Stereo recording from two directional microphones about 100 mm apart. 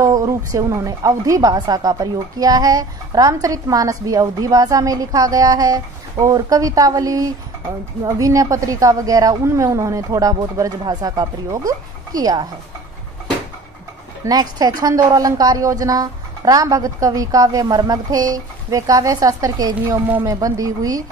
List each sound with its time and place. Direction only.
0.0 s a woman's voice: 35° right (ahead or behind)
14.2 s a woman's voice: 40° right (ahead or behind)